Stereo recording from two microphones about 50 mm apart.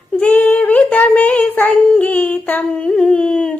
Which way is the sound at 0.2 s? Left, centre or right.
Left.